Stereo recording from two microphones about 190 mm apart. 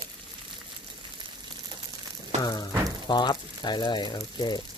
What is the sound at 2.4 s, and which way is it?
Speech, 20° left (ahead or behind).